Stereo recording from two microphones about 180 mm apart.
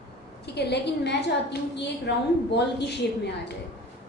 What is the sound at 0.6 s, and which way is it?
A woman's voice, 65° left (ahead or behind).